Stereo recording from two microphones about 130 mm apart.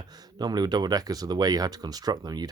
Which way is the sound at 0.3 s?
30° right (ahead or behind).